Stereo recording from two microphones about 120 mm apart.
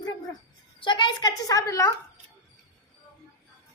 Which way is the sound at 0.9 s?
40° left (ahead or behind).